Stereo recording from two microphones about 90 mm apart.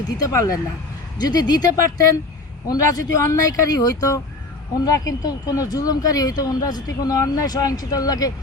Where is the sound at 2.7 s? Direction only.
40° left (ahead or behind).